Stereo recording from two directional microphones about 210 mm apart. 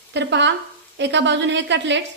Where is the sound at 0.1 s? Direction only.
55° right (ahead or behind).